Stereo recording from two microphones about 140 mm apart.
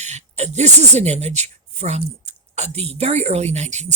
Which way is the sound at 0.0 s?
55° right (ahead or behind).